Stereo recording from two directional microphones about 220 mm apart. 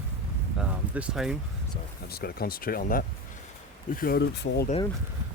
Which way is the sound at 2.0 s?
45° left (ahead or behind).